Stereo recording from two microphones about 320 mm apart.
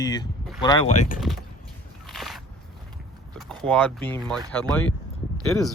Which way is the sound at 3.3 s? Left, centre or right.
Centre.